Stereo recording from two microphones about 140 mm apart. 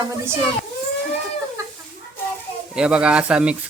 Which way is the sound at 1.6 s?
20° right (ahead or behind).